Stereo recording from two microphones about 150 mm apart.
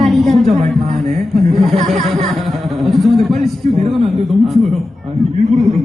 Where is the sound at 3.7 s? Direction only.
45° right (ahead or behind).